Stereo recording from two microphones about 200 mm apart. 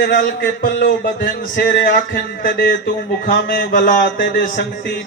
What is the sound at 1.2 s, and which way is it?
Speech, 45° left (ahead or behind).